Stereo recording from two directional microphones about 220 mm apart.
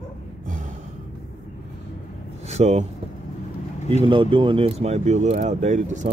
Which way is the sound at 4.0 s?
20° right (ahead or behind).